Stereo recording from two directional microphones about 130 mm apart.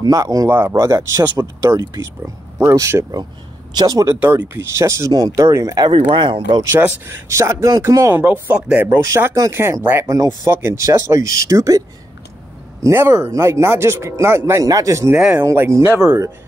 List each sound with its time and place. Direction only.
0.0 s speech: 25° right (ahead or behind)
6.6 s speech: 20° right (ahead or behind)
8.8 s speech: 20° right (ahead or behind)
12.8 s speech: 20° right (ahead or behind)
15.1 s speech: 5° right (ahead or behind)
15.4 s speech: 20° right (ahead or behind)